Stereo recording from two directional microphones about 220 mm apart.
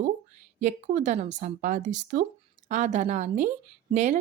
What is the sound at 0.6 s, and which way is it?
Speech, 35° right (ahead or behind).